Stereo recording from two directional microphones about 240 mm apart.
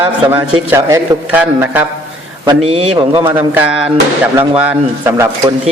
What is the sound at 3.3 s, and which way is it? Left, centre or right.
A man's voice, centre.